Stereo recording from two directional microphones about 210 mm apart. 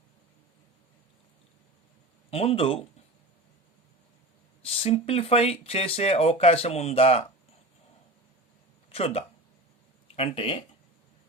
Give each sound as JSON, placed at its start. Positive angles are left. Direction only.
{"t": 2.3, "sound": "speech", "side_deg": 30}
{"t": 4.6, "sound": "speech", "side_deg": 30}
{"t": 8.9, "sound": "speech", "side_deg": 30}